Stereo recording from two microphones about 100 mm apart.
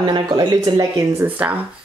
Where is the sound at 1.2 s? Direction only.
20° right (ahead or behind).